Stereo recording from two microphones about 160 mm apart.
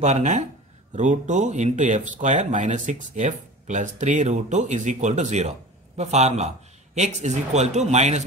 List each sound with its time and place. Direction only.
0.0 s speech: 45° right (ahead or behind)